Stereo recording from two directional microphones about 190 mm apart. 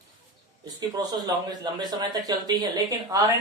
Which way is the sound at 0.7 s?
20° right (ahead or behind).